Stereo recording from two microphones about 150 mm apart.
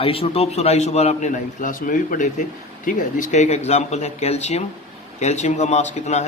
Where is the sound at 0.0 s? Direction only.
40° left (ahead or behind).